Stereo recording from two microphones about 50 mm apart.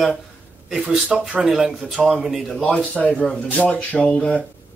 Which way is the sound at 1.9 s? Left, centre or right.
Centre.